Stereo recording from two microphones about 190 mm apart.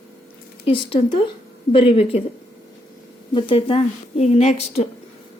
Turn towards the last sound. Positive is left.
turn(degrees=35)  # may be behind; listen again after turning